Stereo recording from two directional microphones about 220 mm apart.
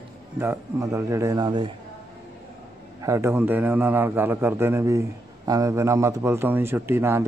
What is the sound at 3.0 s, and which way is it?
A man's voice, 15° right (ahead or behind).